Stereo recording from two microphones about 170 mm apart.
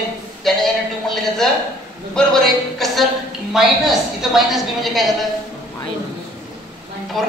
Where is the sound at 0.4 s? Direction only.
Centre (ahead or behind).